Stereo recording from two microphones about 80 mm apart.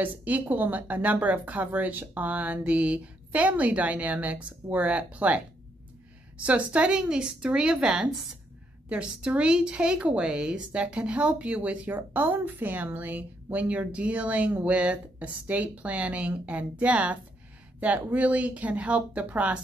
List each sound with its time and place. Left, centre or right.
0.0 s a woman's voice: right